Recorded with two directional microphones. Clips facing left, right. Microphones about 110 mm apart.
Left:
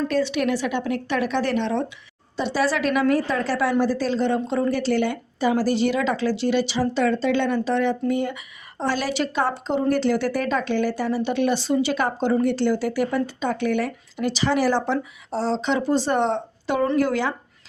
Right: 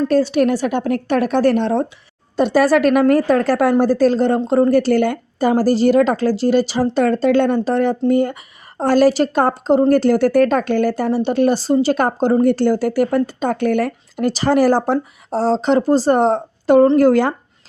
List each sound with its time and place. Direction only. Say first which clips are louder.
0.1 s speech: right 7 dB; 40° right (ahead or behind)